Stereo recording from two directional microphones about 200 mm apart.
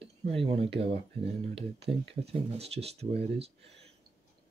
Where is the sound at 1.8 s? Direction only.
30° right (ahead or behind).